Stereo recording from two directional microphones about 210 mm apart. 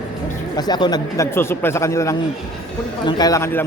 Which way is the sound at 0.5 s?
20° left (ahead or behind).